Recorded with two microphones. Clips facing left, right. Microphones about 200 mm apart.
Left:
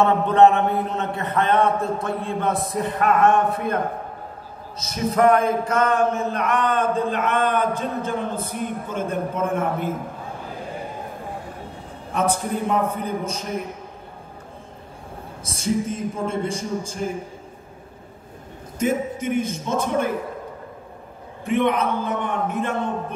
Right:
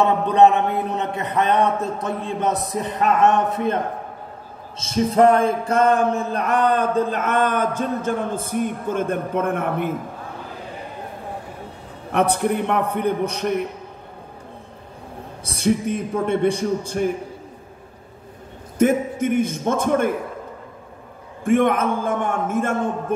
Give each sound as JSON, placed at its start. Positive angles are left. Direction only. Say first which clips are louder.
{"t": 0.0, "sound": "a man's voice", "louder": "even", "side_deg": -15}
{"t": 4.7, "sound": "a sound", "louder": "right 4 dB", "side_deg": -30}
{"t": 8.5, "sound": "a man's voice", "louder": "right 5 dB", "side_deg": -50}
{"t": 12.1, "sound": "a man's voice", "louder": "right 4 dB", "side_deg": -65}
{"t": 15.4, "sound": "a man's voice", "louder": "right 3 dB", "side_deg": -65}
{"t": 18.8, "sound": "a man's voice", "louder": "right 5 dB", "side_deg": -55}
{"t": 21.5, "sound": "a man's voice", "louder": "right 3 dB", "side_deg": -50}